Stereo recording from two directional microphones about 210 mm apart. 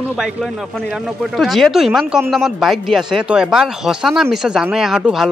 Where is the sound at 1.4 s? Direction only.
Centre (ahead or behind).